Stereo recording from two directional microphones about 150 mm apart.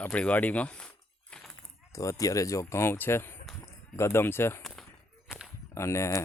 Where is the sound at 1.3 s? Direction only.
5° left (ahead or behind).